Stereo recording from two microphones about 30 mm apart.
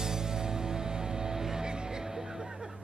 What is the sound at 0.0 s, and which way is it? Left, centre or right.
Music, centre.